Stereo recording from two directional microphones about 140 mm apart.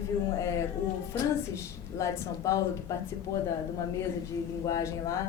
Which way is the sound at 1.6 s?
20° left (ahead or behind).